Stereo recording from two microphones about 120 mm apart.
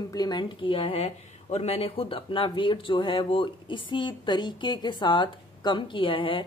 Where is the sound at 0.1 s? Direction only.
35° left (ahead or behind).